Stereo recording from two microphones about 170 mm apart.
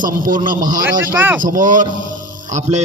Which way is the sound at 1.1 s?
10° right (ahead or behind).